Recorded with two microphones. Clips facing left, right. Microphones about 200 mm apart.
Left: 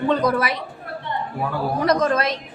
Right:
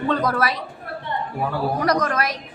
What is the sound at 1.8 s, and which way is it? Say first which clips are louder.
Speech: left 4 dB; 25° left (ahead or behind).